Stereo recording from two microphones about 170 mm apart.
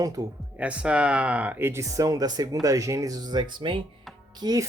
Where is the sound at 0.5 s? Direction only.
5° right (ahead or behind).